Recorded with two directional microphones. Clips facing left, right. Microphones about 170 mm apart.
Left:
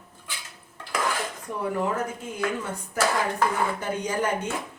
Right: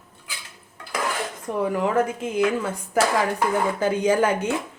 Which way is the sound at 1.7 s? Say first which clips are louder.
Right 5 dB; 90° right.